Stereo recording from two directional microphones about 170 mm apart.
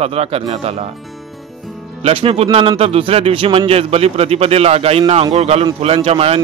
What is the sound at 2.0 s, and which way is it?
Speech, 35° right (ahead or behind).